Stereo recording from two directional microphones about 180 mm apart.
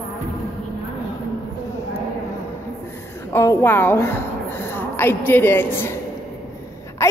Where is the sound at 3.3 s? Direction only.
15° left (ahead or behind).